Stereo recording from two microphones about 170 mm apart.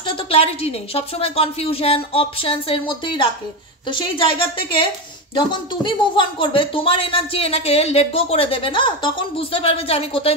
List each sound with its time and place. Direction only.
0.0 s speech: 35° left (ahead or behind)